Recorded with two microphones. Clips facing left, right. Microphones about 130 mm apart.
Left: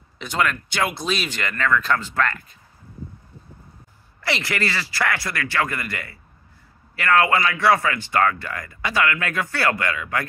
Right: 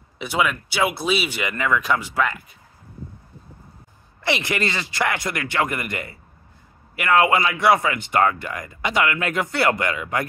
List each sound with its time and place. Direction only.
0.2 s speech: 10° right (ahead or behind)
4.2 s speech: 20° right (ahead or behind)